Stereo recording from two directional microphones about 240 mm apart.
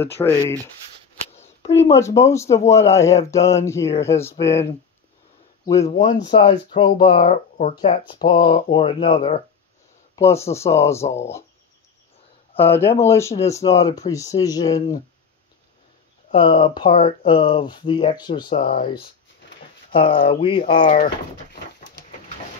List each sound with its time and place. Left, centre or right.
0.0 s speech: centre
1.3 s a sound: left
2.0 s speech: centre
5.9 s speech: left
7.1 s speech: left
10.1 s speech: centre
11.0 s speech: left
12.5 s speech: centre
16.3 s speech: left
18.5 s speech: left
19.9 s speech: left